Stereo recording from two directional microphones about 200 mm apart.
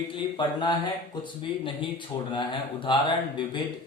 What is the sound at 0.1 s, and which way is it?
Speech, 25° left (ahead or behind).